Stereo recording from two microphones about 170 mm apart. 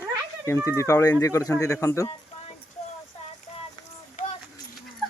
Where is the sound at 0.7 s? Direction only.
20° left (ahead or behind).